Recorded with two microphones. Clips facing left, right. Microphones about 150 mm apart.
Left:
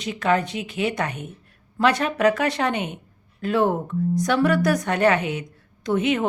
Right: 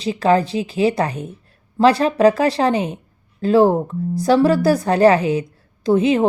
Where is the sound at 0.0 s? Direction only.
30° right (ahead or behind).